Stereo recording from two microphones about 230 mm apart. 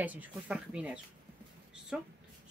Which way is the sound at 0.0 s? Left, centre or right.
Centre.